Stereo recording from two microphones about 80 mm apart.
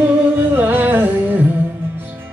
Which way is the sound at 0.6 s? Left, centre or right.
Right.